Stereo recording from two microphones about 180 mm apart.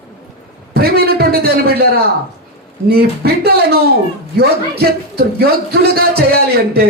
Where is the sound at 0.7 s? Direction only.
60° right (ahead or behind).